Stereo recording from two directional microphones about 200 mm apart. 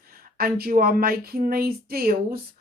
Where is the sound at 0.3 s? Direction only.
50° right (ahead or behind).